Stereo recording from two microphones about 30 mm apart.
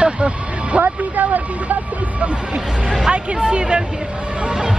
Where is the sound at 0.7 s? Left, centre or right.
Right.